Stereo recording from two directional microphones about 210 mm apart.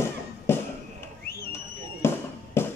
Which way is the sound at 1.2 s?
45° left (ahead or behind).